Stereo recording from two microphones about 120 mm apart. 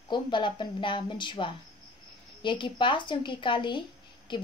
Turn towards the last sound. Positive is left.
turn(degrees=40)  # may be behind; listen again after turning